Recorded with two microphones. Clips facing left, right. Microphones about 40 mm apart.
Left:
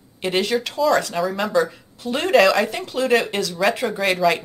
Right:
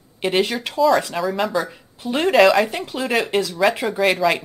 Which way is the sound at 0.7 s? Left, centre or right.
Centre.